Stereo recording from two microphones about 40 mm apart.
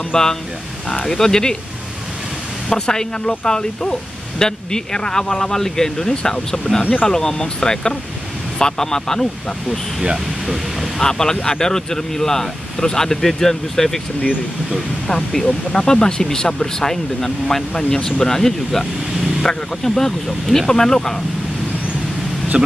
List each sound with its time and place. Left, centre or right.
0.1 s speech: centre
2.7 s speech: centre
6.8 s speech: left
7.1 s speech: centre
10.0 s a sound: centre
11.0 s speech: centre
15.0 s speech: centre